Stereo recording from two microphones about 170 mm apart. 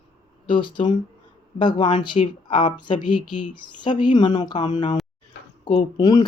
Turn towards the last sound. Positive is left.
turn(degrees=20)  # may be behind; listen again after turning